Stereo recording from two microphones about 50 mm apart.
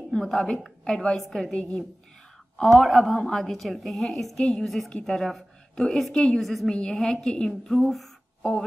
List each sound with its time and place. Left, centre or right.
0.1 s a woman's voice: centre
2.7 s a woman's voice: centre
6.7 s a woman's voice: centre